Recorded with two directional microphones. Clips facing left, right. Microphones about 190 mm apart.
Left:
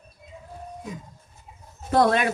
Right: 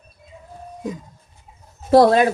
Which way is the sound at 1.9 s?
35° right (ahead or behind).